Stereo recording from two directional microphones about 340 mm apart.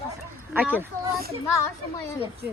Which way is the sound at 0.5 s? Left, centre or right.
Centre.